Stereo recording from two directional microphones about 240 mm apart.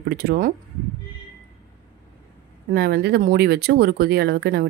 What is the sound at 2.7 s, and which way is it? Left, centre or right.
Speech, right.